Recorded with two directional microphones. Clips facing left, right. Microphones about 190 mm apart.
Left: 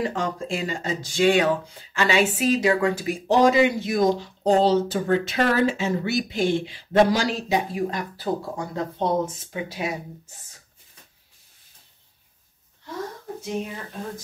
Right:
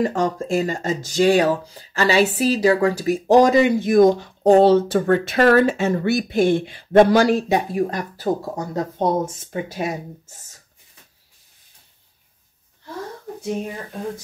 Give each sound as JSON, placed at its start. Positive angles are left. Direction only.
{"t": 0.0, "sound": "speech", "side_deg": -45}